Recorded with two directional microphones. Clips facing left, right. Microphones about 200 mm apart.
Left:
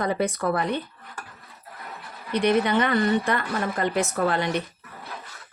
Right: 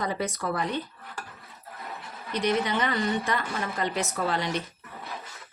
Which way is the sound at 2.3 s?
55° left (ahead or behind).